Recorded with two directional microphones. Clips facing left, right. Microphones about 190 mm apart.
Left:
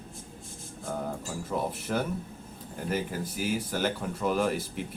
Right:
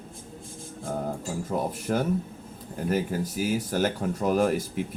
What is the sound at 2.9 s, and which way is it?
Speech, 45° right (ahead or behind).